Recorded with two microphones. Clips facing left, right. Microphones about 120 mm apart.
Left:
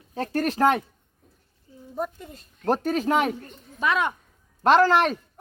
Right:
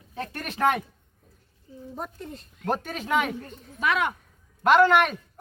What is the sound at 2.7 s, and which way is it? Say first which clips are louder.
Speech: left 5 dB; 35° left (ahead or behind).